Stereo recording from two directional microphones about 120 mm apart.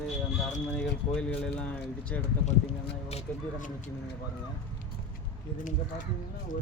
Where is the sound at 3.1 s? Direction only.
90° left.